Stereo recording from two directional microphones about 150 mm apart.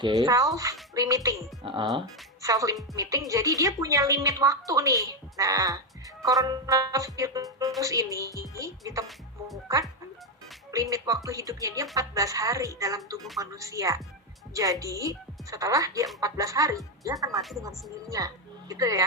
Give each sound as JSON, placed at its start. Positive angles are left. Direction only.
{"t": 0.0, "sound": "a woman's voice", "side_deg": -25}
{"t": 1.6, "sound": "speech", "side_deg": -35}
{"t": 2.4, "sound": "a woman's voice", "side_deg": -20}
{"t": 18.7, "sound": "a woman's voice", "side_deg": -25}